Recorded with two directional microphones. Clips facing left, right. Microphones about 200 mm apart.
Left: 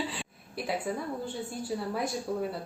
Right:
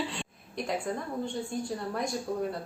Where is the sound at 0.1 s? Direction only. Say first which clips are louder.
Right 1 dB; 5° left (ahead or behind).